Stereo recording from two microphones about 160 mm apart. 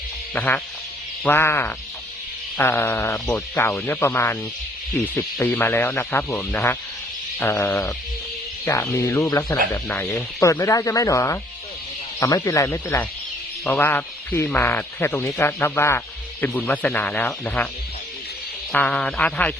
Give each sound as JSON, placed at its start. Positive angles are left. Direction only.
{"t": 0.3, "sound": "a man's voice", "side_deg": 10}
{"t": 18.7, "sound": "a man's voice", "side_deg": 5}